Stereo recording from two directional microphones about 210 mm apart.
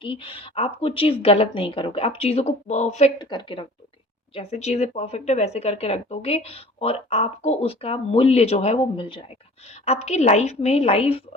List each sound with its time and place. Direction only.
0.0 s a woman's voice: 25° left (ahead or behind)